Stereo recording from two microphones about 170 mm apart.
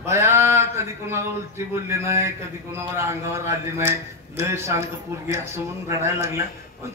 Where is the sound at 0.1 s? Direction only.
15° right (ahead or behind).